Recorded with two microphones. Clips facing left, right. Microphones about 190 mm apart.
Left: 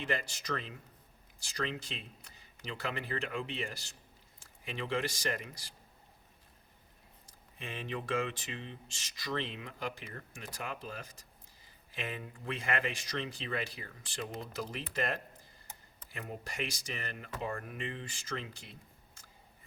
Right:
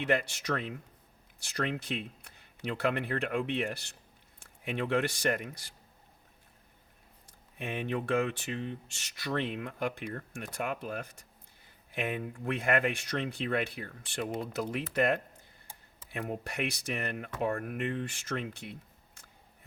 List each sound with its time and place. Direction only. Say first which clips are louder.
0.0 s speech: right 7 dB; 65° right (ahead or behind)
7.3 s speech: right 7 dB; 65° right (ahead or behind)